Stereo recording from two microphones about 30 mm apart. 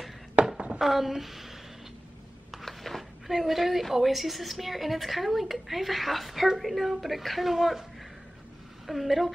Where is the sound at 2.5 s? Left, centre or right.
Centre.